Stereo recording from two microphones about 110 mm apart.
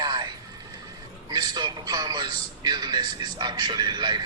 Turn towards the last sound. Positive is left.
turn(degrees=-40)  # may be behind; listen again after turning